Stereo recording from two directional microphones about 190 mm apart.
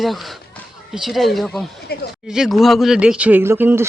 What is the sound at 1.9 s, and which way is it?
Speech, 55° left (ahead or behind).